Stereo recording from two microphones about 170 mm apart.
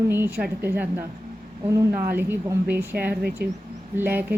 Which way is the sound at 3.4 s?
65° right (ahead or behind).